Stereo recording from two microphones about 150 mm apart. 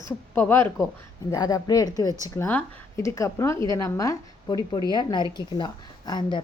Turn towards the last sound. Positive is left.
turn(degrees=30)  # may be behind; listen again after turning